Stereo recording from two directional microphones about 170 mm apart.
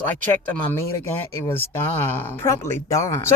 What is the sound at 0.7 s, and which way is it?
Speech, 15° left (ahead or behind).